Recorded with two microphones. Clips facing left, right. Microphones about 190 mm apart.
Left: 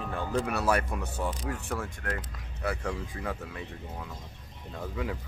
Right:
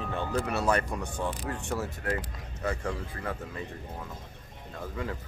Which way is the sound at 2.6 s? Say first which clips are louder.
Even; 10° left (ahead or behind).